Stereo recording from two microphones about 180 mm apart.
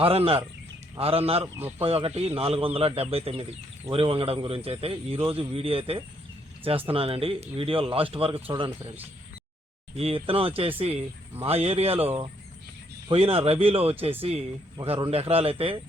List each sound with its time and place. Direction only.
0.0 s a man's voice: 30° right (ahead or behind)
9.9 s a man's voice: 30° right (ahead or behind)